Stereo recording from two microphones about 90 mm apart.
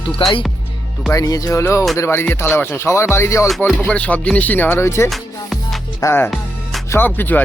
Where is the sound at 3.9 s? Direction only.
15° left (ahead or behind).